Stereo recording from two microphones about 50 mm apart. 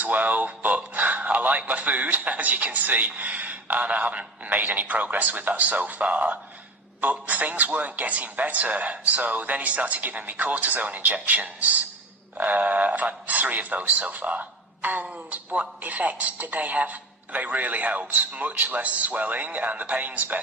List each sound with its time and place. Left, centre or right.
0.0 s speech: right